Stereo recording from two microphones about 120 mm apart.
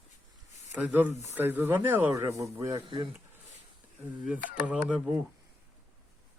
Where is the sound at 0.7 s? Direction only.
15° right (ahead or behind).